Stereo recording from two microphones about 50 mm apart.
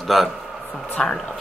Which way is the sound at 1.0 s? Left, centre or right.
Centre.